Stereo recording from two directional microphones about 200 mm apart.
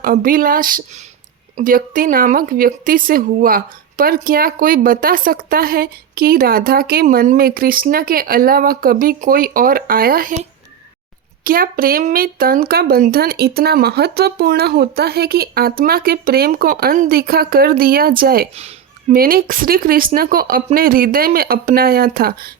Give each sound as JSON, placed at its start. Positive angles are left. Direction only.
{"t": 0.0, "sound": "a woman's voice", "side_deg": -45}
{"t": 11.4, "sound": "a woman's voice", "side_deg": -45}
{"t": 18.5, "sound": "a sound", "side_deg": -30}
{"t": 19.1, "sound": "a woman's voice", "side_deg": -45}